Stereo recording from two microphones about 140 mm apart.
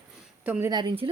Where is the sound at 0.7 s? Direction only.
30° right (ahead or behind).